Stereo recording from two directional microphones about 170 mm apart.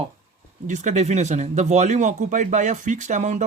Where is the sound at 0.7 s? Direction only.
45° right (ahead or behind).